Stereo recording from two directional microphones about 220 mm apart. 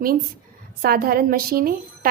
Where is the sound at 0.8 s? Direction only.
45° right (ahead or behind).